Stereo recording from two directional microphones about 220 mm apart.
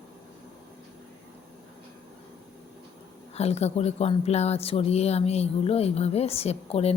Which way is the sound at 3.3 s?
30° left (ahead or behind).